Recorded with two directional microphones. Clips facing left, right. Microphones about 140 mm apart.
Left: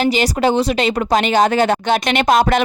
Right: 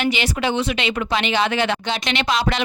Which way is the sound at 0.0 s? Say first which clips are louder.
Left 6 dB; 40° left (ahead or behind).